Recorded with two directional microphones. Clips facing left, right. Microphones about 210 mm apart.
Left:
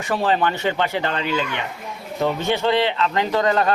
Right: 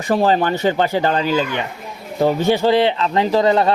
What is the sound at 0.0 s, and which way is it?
A man's voice, 40° right (ahead or behind).